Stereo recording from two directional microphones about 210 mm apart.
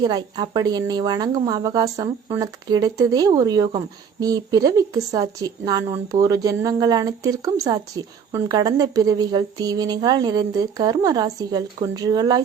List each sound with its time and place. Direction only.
0.0 s a woman's voice: 20° right (ahead or behind)